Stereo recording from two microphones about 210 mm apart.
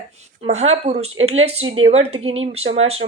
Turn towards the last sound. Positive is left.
turn(degrees=-30)  # may be behind; listen again after turning